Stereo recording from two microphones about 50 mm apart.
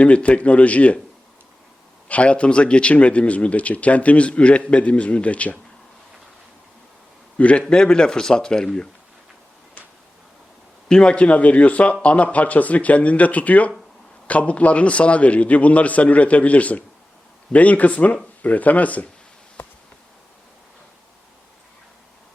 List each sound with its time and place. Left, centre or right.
0.0 s speech: left
2.0 s speech: left
7.3 s a man's voice: left
7.7 s speech: centre
10.8 s speech: centre
19.6 s bee: left